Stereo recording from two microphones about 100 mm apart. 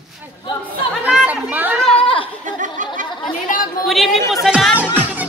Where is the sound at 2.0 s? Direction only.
65° left (ahead or behind).